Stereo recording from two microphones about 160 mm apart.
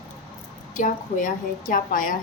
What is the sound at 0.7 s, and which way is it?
A woman's voice, 55° left (ahead or behind).